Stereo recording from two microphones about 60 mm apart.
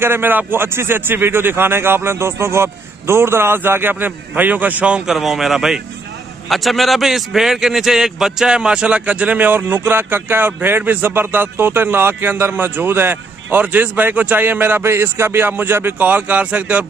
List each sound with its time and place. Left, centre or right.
0.0 s a man's voice: right
5.0 s a man's voice: centre; by 14.9 s right
14.9 s a man's voice: right